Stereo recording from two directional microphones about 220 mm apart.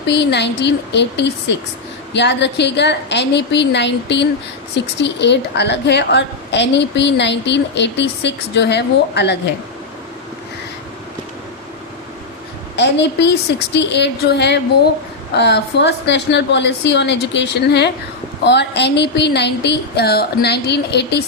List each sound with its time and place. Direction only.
0.1 s a woman's voice: 50° left (ahead or behind)
12.7 s a woman's voice: 55° left (ahead or behind)